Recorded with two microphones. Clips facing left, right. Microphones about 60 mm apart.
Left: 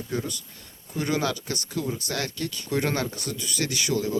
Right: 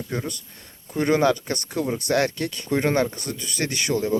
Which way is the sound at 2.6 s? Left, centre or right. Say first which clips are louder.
Right 5 dB; right.